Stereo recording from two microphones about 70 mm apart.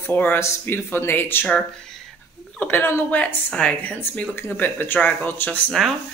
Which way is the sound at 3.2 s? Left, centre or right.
Centre.